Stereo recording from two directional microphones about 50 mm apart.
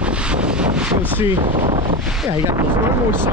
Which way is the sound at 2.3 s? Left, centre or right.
Right.